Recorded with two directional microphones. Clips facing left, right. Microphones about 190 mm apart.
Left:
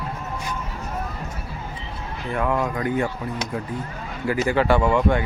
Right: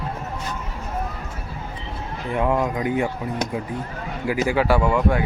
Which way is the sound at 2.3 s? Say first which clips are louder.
Right 2 dB; 20° right (ahead or behind).